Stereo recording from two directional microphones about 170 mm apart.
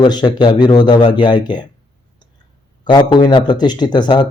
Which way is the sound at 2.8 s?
25° left (ahead or behind).